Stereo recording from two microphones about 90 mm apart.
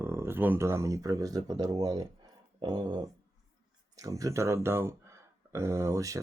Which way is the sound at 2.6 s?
55° right (ahead or behind).